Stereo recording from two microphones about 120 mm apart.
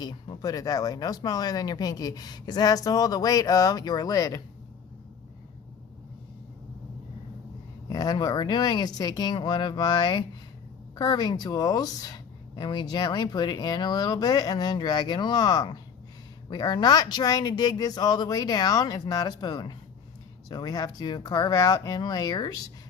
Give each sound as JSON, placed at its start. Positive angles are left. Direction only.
{"t": 0.0, "sound": "a woman's voice", "side_deg": 35}
{"t": 7.9, "sound": "a woman's voice", "side_deg": 30}